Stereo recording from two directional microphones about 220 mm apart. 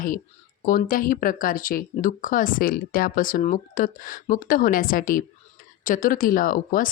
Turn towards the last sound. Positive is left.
turn(degrees=40)  # may be behind; listen again after turning